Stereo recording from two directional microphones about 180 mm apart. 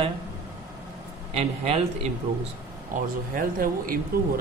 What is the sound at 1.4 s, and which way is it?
Speech, 35° right (ahead or behind).